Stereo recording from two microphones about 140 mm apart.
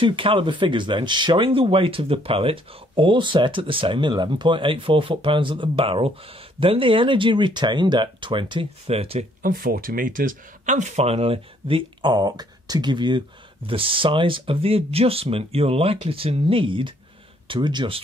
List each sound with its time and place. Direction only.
0.0 s speech: 40° right (ahead or behind)
9.4 s speech: 90° right; by 18.0 s 35° right (ahead or behind)